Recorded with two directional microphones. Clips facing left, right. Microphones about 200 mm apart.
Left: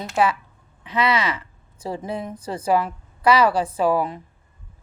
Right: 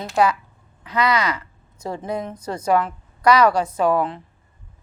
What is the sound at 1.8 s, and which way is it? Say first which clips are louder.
A woman's voice: right 1 dB; 5° left (ahead or behind).